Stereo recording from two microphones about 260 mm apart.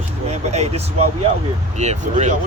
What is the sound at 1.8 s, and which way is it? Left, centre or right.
Speech, right.